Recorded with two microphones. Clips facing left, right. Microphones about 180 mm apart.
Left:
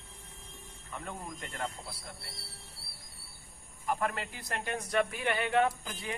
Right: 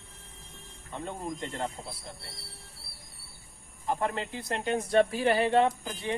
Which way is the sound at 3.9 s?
25° right (ahead or behind).